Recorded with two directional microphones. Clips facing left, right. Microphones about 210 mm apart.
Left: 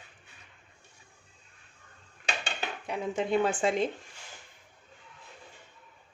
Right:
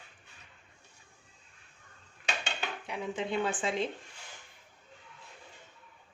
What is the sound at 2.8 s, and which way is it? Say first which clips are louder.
Speech: left 5 dB; 45° left (ahead or behind).